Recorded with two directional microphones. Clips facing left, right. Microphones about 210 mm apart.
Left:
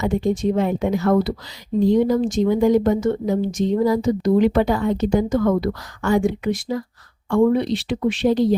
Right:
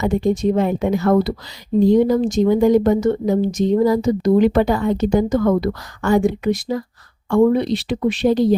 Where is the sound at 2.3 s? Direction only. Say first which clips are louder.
Right 3 dB; 45° right (ahead or behind).